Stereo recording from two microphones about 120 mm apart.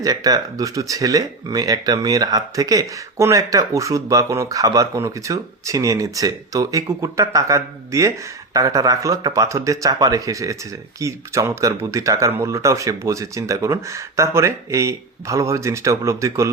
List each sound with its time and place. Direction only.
0.0 s speech: 30° right (ahead or behind)